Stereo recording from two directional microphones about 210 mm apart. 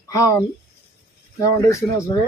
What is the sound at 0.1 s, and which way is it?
Speech, 15° left (ahead or behind).